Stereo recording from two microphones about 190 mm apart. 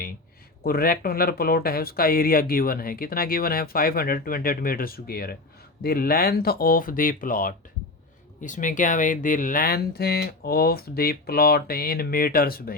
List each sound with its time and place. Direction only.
0.6 s speech: 50° left (ahead or behind)